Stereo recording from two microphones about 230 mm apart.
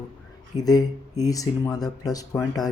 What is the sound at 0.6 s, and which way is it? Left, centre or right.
Speech, centre.